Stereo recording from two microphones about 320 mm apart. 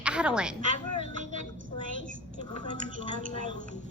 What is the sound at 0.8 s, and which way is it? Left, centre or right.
Speech, left.